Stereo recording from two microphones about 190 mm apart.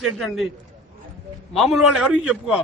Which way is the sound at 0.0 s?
Centre (ahead or behind).